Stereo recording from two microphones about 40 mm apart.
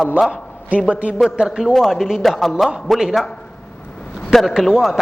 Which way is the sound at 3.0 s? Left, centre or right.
Centre.